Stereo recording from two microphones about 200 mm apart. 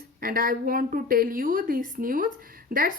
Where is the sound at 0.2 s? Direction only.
45° right (ahead or behind).